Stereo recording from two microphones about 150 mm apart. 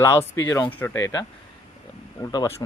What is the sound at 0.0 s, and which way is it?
Speech, 20° left (ahead or behind).